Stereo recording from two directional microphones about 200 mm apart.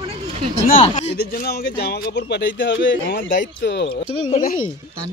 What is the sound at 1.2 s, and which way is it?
Speech, 50° left (ahead or behind).